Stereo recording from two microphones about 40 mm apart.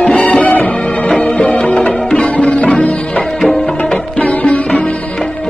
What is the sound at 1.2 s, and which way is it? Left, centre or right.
Music, left.